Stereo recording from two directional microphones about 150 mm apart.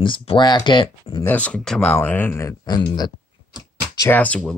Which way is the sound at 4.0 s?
15° left (ahead or behind).